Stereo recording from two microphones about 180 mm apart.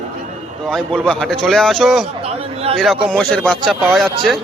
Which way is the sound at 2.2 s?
35° right (ahead or behind).